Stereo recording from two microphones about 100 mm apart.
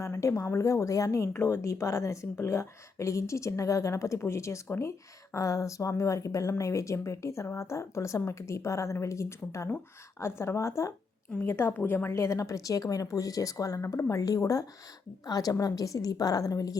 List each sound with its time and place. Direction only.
0.0 s a woman's voice: 30° left (ahead or behind)